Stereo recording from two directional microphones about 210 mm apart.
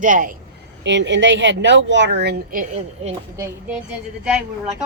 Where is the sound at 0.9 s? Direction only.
60° right (ahead or behind); by 3.1 s 40° right (ahead or behind).